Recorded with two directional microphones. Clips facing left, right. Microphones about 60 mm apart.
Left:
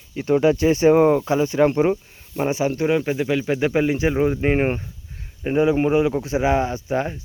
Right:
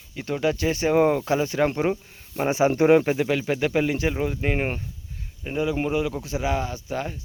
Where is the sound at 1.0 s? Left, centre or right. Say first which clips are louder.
Left 4 dB; centre.